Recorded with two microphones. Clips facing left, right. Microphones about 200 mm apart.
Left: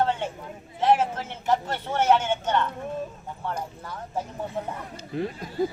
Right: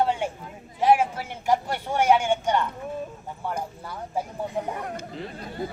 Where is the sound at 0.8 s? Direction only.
10° right (ahead or behind).